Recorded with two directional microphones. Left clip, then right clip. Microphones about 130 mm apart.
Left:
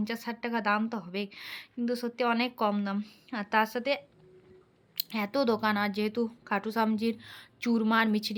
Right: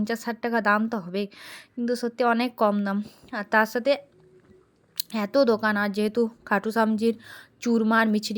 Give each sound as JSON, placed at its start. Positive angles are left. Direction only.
{"t": 0.0, "sound": "a woman's voice", "side_deg": -35}